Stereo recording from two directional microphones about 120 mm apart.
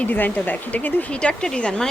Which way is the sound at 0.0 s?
15° left (ahead or behind).